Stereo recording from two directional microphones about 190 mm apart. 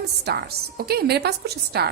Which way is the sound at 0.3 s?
55° right (ahead or behind).